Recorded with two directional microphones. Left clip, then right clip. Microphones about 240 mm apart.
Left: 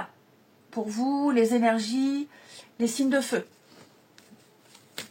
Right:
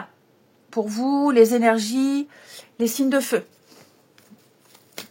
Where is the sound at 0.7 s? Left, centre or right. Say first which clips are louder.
Right 6 dB; right.